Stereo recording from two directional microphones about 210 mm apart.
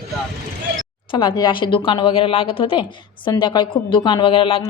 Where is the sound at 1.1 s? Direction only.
20° left (ahead or behind).